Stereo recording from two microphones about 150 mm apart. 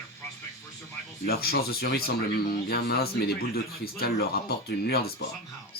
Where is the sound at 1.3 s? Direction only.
90° left.